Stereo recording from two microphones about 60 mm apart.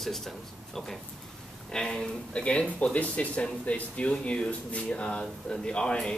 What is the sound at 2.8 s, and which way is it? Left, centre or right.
Speech, left.